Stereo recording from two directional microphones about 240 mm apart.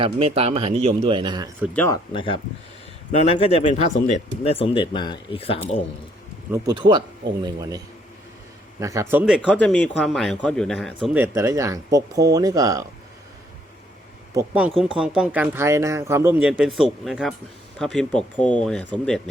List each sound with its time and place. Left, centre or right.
0.0 s speech: right
1.6 s speech: centre
2.1 s speech: left
6.5 s speech: centre
8.8 s speech: centre
11.2 s speech: centre
14.3 s speech: centre